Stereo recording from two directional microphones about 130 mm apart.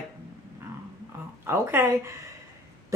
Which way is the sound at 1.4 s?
20° right (ahead or behind).